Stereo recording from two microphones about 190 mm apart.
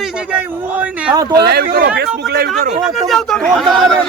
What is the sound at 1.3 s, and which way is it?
Speech, 55° right (ahead or behind).